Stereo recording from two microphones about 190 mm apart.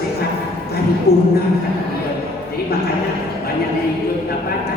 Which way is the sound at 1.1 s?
55° left (ahead or behind).